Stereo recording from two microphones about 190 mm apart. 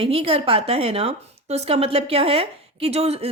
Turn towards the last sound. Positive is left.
turn(degrees=-30)  # may be behind; listen again after turning